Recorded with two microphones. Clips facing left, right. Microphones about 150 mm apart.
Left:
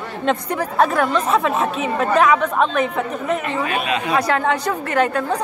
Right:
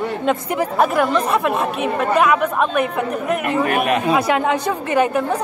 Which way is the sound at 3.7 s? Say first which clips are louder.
Right 5 dB; 55° right (ahead or behind).